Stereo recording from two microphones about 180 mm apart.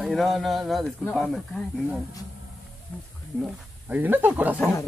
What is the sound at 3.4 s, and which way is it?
Speech, 10° right (ahead or behind).